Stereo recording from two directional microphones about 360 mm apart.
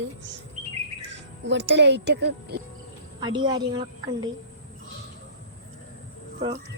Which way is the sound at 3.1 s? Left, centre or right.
Centre.